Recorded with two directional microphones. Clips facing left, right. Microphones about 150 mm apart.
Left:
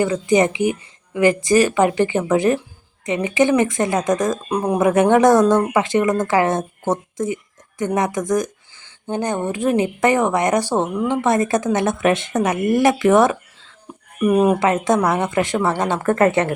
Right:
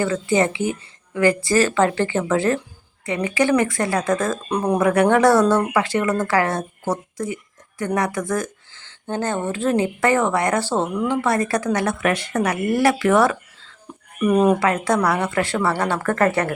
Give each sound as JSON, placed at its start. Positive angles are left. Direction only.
{"t": 0.0, "sound": "a woman's voice", "side_deg": 15}
{"t": 4.8, "sound": "speech", "side_deg": 20}
{"t": 14.2, "sound": "a woman's voice", "side_deg": 5}
{"t": 14.6, "sound": "speech", "side_deg": 20}